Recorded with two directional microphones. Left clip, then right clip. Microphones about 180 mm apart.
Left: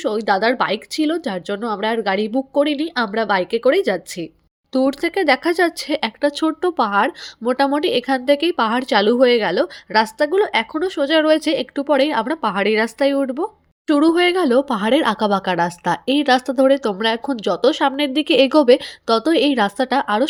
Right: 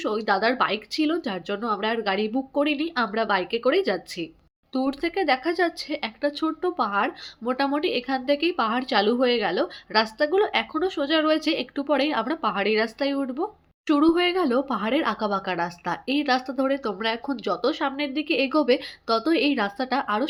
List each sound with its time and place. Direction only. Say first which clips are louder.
0.0 s speech: left 5 dB; 35° left (ahead or behind)